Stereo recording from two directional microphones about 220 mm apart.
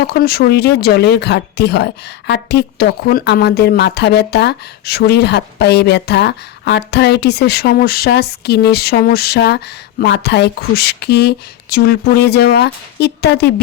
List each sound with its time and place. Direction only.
0.0 s speech: 45° left (ahead or behind)